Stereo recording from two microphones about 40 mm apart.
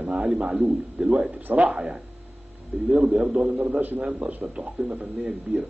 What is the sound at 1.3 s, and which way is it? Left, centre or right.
Speech, right.